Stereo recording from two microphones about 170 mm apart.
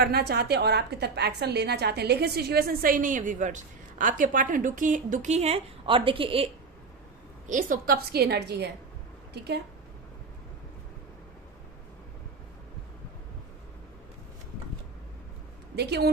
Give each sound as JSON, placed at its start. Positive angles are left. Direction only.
{"t": 0.0, "sound": "a woman's voice", "side_deg": -70}
{"t": 7.4, "sound": "a woman's voice", "side_deg": -50}
{"t": 15.7, "sound": "speech", "side_deg": -75}